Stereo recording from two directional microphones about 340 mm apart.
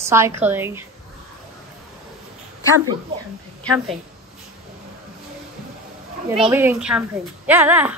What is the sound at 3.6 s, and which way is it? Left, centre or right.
Speech, centre.